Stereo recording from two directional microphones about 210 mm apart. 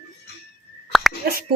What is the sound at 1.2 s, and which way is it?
Speech, 45° right (ahead or behind).